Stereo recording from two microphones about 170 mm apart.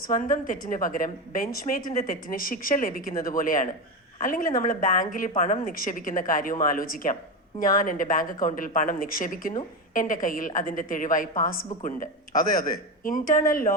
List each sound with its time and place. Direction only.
0.2 s a woman's voice: 50° left (ahead or behind)